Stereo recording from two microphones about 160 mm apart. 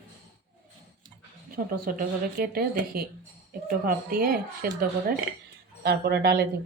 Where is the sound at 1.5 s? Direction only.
65° right (ahead or behind).